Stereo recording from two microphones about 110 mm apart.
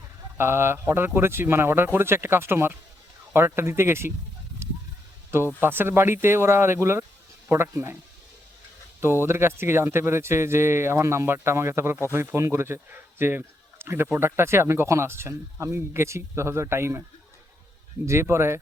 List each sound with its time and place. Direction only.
0.3 s a man's voice: 20° right (ahead or behind)
4.6 s a sound: 20° right (ahead or behind)
5.5 s a man's voice: 20° right (ahead or behind)
9.0 s a man's voice: 20° right (ahead or behind)
18.0 s a man's voice: 25° right (ahead or behind)